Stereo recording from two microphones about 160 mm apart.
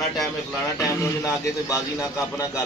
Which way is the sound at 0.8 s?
20° left (ahead or behind).